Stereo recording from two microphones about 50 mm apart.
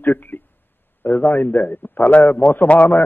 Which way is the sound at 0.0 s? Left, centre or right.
Left.